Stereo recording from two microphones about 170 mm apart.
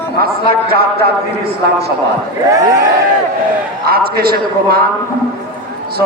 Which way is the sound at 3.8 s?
65° right (ahead or behind).